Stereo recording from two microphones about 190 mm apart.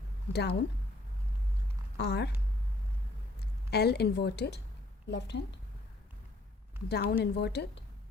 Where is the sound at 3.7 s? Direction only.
55° left (ahead or behind).